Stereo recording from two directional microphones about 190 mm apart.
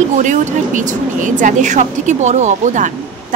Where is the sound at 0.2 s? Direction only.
40° right (ahead or behind).